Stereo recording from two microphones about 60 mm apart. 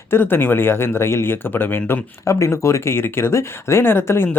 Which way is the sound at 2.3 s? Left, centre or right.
Left.